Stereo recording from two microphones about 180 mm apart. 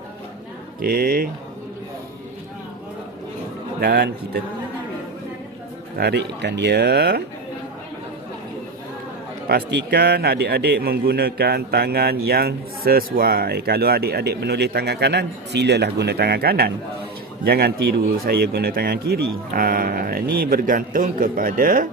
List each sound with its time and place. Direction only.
0.8 s speech: 55° right (ahead or behind)
3.8 s speech: 65° right (ahead or behind)
6.0 s speech: 65° right (ahead or behind)
9.5 s speech: 65° right (ahead or behind)